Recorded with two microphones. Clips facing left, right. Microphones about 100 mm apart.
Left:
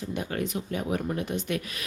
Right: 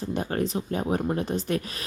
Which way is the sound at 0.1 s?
35° right (ahead or behind).